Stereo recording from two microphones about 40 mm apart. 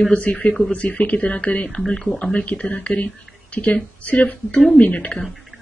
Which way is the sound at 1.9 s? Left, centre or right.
Left.